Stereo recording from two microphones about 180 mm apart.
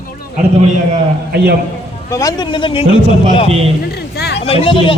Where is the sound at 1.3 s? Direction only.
65° right (ahead or behind).